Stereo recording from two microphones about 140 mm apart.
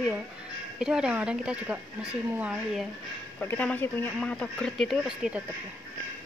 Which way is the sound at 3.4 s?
15° left (ahead or behind).